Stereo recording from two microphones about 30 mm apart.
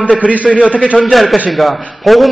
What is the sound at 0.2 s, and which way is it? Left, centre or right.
Speech, right.